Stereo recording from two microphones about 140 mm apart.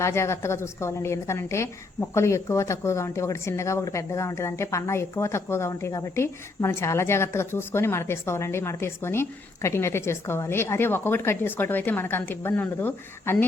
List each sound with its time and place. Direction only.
0.0 s a woman's voice: 20° left (ahead or behind)